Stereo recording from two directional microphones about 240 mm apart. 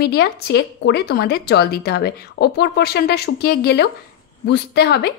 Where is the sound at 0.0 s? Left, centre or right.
Left.